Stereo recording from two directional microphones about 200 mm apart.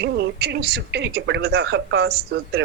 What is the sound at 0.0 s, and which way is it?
A woman's voice, 55° right (ahead or behind).